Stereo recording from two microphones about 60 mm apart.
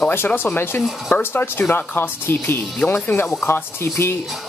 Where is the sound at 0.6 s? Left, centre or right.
Left.